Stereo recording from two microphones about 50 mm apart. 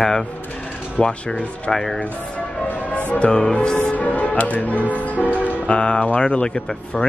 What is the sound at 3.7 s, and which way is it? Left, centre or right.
Music, left.